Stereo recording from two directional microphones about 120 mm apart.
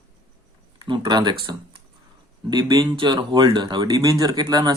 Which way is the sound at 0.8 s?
45° right (ahead or behind).